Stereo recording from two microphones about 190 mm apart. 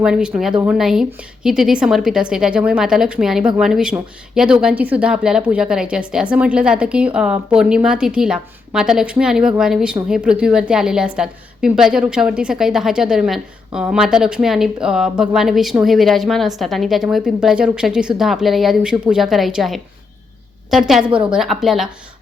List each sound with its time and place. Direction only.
0.0 s a woman's voice: 5° right (ahead or behind)